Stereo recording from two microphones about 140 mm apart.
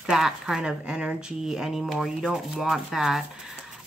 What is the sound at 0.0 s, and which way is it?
Speech, 5° right (ahead or behind).